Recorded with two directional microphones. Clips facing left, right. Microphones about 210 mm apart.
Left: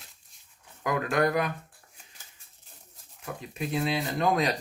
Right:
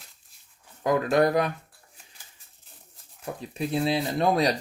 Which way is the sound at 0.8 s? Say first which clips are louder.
Right 4 dB; 30° right (ahead or behind).